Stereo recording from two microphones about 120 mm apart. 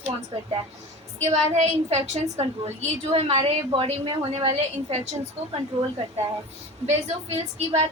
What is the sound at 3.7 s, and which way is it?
Speech, 45° right (ahead or behind).